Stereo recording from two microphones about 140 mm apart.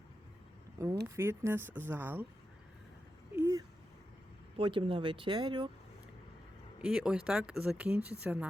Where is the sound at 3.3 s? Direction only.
20° right (ahead or behind).